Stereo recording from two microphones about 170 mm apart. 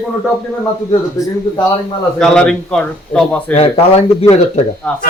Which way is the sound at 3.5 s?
35° left (ahead or behind).